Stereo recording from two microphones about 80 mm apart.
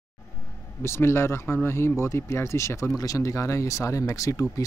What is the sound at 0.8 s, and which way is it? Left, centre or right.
Speech, left.